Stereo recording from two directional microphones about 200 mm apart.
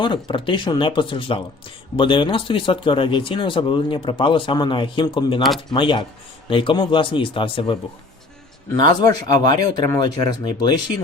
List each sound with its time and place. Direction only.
0.0 s speech: 25° left (ahead or behind)